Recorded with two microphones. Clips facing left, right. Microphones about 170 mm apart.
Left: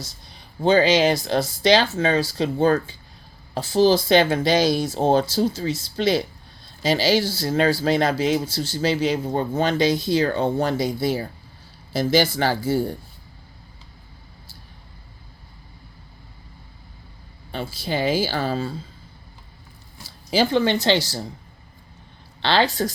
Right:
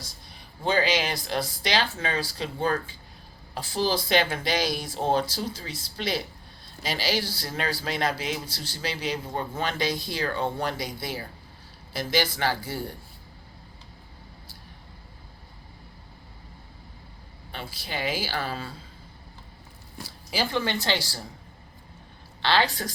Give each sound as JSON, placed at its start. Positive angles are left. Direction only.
{"t": 0.6, "sound": "speech", "side_deg": 25}
{"t": 17.5, "sound": "speech", "side_deg": 30}
{"t": 20.5, "sound": "speech", "side_deg": 25}
{"t": 22.4, "sound": "speech", "side_deg": 25}